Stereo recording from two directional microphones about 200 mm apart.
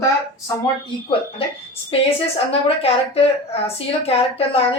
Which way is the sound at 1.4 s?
30° left (ahead or behind).